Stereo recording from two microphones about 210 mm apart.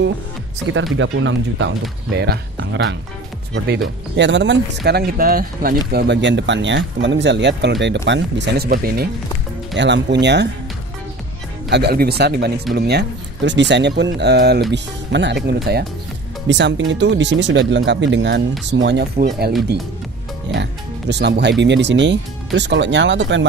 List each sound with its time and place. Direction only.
0.9 s speech: 65° right (ahead or behind); by 9.1 s 45° right (ahead or behind)
9.8 s speech: 60° right (ahead or behind)
11.7 s speech: 50° right (ahead or behind)
21.1 s speech: 55° right (ahead or behind)